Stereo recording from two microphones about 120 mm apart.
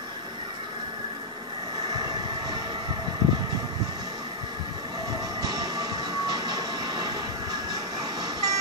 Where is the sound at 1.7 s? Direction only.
35° right (ahead or behind).